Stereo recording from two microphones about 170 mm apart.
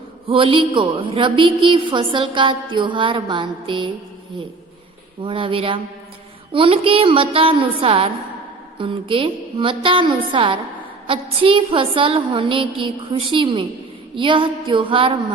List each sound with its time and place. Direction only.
0.3 s a woman's voice: 30° right (ahead or behind)
5.2 s a woman's voice: 30° right (ahead or behind)